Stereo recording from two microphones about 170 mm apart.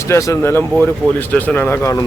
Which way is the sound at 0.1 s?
15° left (ahead or behind).